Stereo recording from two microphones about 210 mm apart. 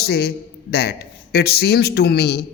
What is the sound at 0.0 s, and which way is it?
A man's voice, 50° left (ahead or behind).